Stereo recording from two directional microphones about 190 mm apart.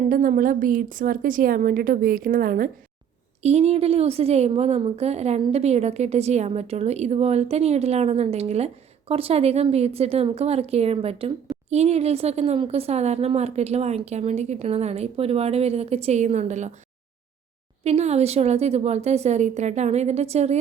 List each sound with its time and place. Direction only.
0.1 s a woman's voice: 45° right (ahead or behind)
3.4 s a woman's voice: 35° right (ahead or behind)
17.8 s a woman's voice: 35° right (ahead or behind)